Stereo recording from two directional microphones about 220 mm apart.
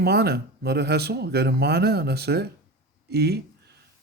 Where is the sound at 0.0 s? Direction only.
45° right (ahead or behind).